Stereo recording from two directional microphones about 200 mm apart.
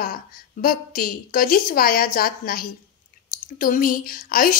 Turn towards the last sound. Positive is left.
turn(degrees=45)  # may be behind; listen again after turning